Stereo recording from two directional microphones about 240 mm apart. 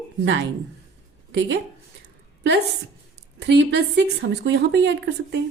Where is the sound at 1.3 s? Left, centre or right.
Right.